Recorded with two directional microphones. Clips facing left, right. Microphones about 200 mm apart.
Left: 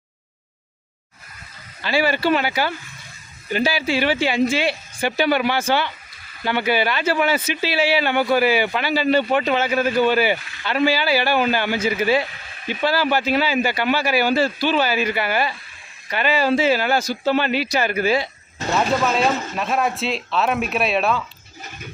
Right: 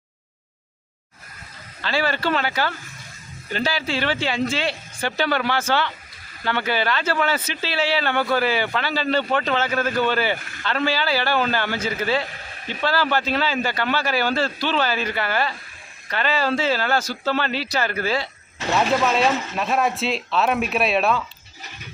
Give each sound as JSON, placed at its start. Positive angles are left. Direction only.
{"t": 1.8, "sound": "speech", "side_deg": 10}
{"t": 10.3, "sound": "speech", "side_deg": -50}
{"t": 10.6, "sound": "speech", "side_deg": 10}
{"t": 18.7, "sound": "speech", "side_deg": 0}